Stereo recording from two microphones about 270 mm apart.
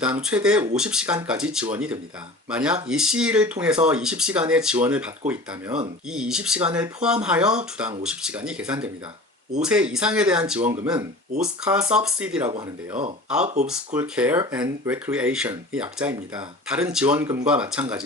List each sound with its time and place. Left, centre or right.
0.0 s speech: centre
13.4 s speech: right
13.7 s speech: centre